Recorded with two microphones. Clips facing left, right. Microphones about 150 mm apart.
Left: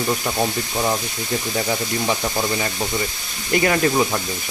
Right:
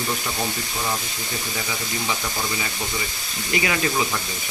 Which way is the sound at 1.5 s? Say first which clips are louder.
Left 7 dB; 50° left (ahead or behind).